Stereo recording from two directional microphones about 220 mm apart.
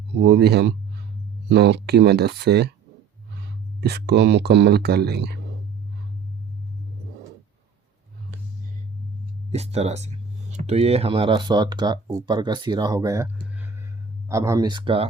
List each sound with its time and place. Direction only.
0.1 s speech: 50° right (ahead or behind)
3.8 s speech: 50° right (ahead or behind)
9.5 s speech: 30° right (ahead or behind)